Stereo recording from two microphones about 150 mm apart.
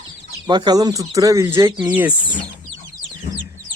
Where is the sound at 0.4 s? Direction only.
30° right (ahead or behind).